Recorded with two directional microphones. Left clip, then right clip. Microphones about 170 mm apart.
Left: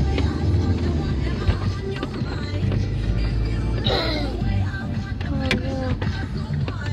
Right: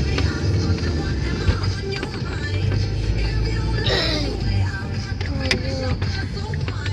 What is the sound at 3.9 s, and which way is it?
Music, 20° left (ahead or behind).